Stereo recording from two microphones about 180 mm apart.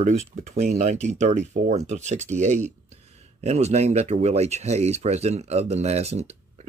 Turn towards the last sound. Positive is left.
turn(degrees=-35)  # may be behind; listen again after turning